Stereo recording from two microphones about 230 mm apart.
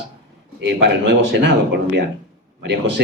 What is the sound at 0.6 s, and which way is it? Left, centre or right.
A man's voice, right.